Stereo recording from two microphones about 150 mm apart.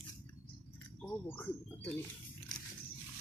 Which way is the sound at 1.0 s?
15° left (ahead or behind).